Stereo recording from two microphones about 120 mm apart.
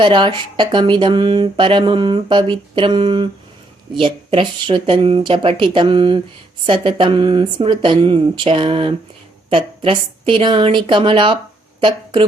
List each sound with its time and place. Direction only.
0.0 s speech: 40° right (ahead or behind)